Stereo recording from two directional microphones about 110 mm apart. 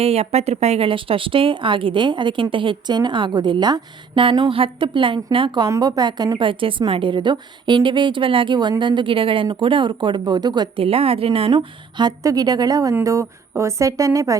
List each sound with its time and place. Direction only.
0.0 s speech: 65° right (ahead or behind); by 5.6 s 50° right (ahead or behind)
5.6 s speech: 35° right (ahead or behind)
10.8 s speech: 60° right (ahead or behind)
11.5 s a woman's voice: 40° right (ahead or behind)